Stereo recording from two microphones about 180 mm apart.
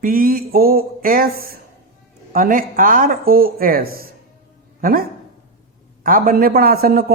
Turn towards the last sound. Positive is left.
turn(degrees=-55)  # may be behind; listen again after turning